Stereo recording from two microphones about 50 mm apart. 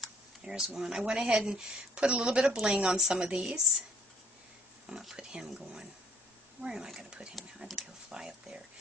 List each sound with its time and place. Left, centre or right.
0.4 s a sound: centre
0.7 s a woman's voice: centre
4.8 s a woman's voice: centre
7.3 s speech: centre
8.1 s a woman's voice: centre